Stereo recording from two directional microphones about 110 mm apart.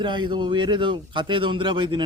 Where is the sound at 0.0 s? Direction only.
45° right (ahead or behind).